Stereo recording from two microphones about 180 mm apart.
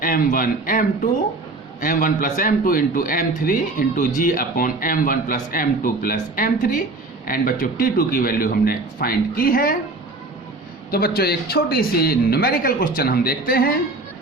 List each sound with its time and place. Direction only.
0.0 s a man's voice: 50° left (ahead or behind)
10.9 s speech: 60° left (ahead or behind)